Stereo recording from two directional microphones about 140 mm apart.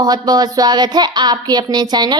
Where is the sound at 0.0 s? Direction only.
30° right (ahead or behind).